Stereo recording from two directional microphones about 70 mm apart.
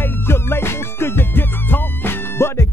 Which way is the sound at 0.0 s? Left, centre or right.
Left.